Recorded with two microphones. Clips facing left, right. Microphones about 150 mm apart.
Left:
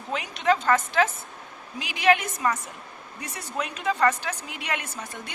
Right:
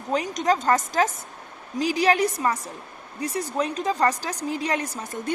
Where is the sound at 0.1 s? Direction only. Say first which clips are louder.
Right 2 dB; 40° right (ahead or behind).